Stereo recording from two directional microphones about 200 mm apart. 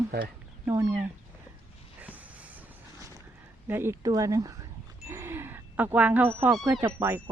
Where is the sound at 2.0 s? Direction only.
10° right (ahead or behind).